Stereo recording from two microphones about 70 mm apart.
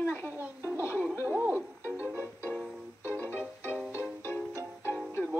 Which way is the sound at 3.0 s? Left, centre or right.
Left.